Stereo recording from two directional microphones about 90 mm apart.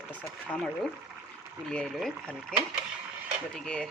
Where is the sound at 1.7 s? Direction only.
5° left (ahead or behind).